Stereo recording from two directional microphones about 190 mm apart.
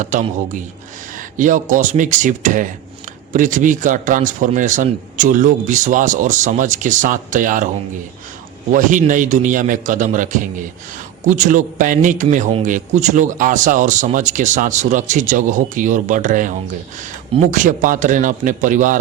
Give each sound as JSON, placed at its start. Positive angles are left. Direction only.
{"t": 0.0, "sound": "a man's voice", "side_deg": -40}
{"t": 8.7, "sound": "a man's voice", "side_deg": -40}